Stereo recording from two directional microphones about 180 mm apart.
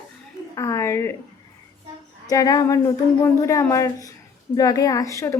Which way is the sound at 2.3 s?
20° left (ahead or behind).